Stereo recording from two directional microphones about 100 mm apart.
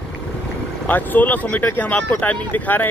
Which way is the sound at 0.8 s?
15° left (ahead or behind).